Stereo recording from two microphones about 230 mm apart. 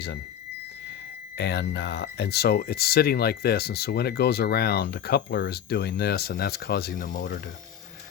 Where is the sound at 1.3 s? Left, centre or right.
Left.